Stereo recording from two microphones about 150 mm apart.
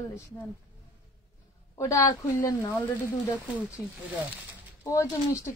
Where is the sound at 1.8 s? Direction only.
20° left (ahead or behind).